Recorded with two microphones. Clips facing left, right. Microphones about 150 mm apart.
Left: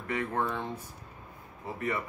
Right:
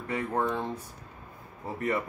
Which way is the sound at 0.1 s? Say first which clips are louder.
Right 2 dB; 30° right (ahead or behind).